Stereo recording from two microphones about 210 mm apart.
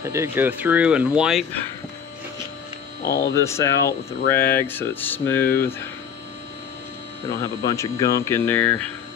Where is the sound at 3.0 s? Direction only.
50° left (ahead or behind).